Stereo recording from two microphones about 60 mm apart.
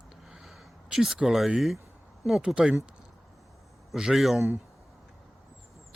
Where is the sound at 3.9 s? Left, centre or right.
Centre.